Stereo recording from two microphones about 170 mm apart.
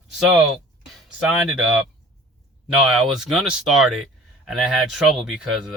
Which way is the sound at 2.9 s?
Centre (ahead or behind).